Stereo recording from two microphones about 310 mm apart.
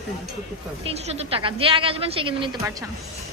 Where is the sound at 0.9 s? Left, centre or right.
Centre.